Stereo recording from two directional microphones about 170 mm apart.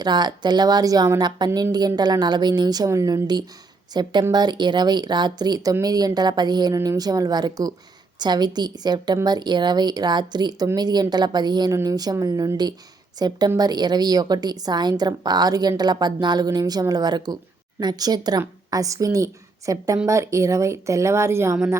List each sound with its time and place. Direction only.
0.0 s a woman's voice: 25° right (ahead or behind)